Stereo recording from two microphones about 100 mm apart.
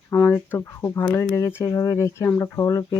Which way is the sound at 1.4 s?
25° left (ahead or behind).